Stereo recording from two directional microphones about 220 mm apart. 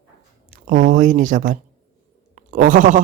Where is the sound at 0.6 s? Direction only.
40° right (ahead or behind).